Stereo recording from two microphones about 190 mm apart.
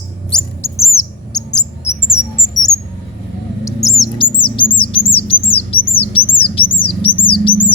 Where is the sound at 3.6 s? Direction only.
15° left (ahead or behind).